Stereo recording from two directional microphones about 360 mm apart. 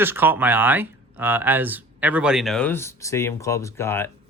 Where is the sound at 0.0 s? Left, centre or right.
Centre.